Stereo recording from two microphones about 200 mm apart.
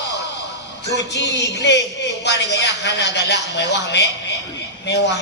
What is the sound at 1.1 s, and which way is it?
A woman's voice, 60° left (ahead or behind).